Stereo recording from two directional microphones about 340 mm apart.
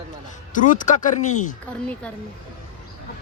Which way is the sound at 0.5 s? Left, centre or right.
Left.